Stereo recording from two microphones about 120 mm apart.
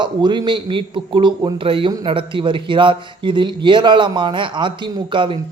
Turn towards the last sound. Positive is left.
turn(degrees=-45)  # may be behind; listen again after turning